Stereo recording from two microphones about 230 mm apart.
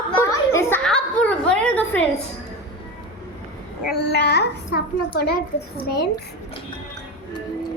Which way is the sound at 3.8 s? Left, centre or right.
Left.